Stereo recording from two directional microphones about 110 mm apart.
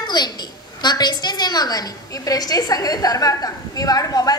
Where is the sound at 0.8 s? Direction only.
40° left (ahead or behind).